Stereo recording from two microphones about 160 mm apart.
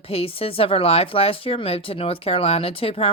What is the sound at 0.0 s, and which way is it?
Speech, 35° left (ahead or behind).